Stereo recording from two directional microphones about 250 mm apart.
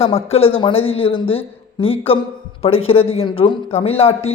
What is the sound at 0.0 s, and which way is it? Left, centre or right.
Speech, left.